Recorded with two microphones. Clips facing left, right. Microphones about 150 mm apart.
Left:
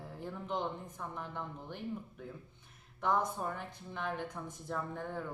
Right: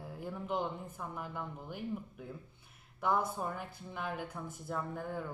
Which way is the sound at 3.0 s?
5° right (ahead or behind).